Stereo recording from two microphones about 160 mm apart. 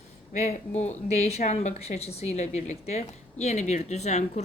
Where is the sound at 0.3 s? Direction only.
45° left (ahead or behind).